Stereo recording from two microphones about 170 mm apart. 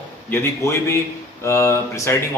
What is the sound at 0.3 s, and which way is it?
A man's voice, 15° left (ahead or behind).